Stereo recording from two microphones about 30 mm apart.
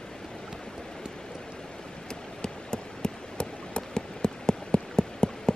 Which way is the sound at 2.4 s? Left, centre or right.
Left.